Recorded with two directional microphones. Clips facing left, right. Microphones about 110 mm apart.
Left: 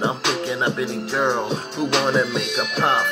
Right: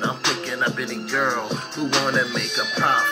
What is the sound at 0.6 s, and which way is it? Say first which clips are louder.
Music: left 3 dB; 25° left (ahead or behind).